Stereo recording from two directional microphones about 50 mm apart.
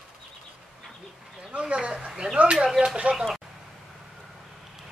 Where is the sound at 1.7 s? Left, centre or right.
Centre.